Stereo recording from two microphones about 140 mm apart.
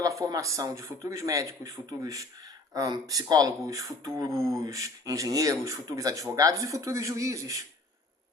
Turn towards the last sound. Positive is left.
turn(degrees=-25)  # may be behind; listen again after turning